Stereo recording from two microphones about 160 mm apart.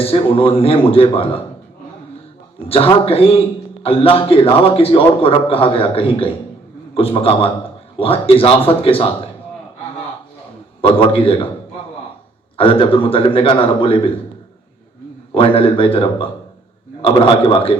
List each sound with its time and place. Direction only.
0.0 s a man's voice: 35° left (ahead or behind)
2.6 s a man's voice: 35° left (ahead or behind)
10.8 s a man's voice: 35° left (ahead or behind)
12.5 s a man's voice: 35° left (ahead or behind)
15.4 s a man's voice: 35° left (ahead or behind)